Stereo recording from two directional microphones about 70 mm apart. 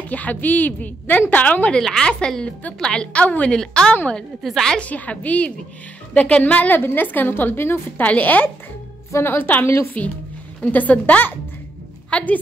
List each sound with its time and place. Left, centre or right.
0.0 s a woman's voice: left
1.8 s a woman's voice: centre
4.4 s a woman's voice: centre
4.7 s a woman's voice: left